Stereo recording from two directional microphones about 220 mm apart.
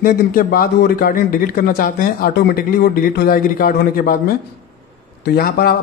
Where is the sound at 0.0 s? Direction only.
40° left (ahead or behind).